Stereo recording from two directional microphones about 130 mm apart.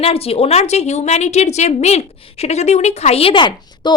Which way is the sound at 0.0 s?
50° left (ahead or behind).